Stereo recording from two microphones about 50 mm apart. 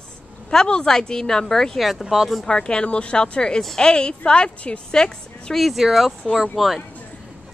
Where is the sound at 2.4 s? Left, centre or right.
Centre.